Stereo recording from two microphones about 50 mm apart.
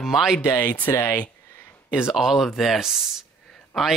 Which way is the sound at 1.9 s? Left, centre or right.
Centre.